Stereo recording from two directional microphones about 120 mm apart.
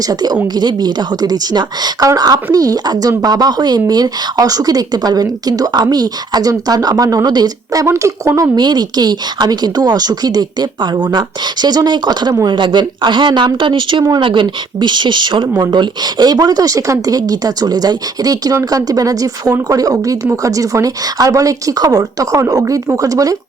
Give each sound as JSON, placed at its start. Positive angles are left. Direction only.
{"t": 0.1, "sound": "speech", "side_deg": -35}